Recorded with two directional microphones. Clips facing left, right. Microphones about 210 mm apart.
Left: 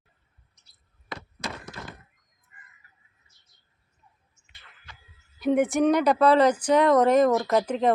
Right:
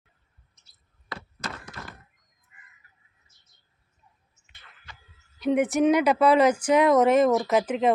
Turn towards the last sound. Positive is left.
turn(degrees=-5)  # may be behind; listen again after turning